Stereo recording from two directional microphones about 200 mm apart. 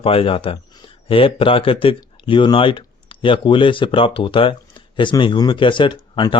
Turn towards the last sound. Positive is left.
turn(degrees=25)  # may be behind; listen again after turning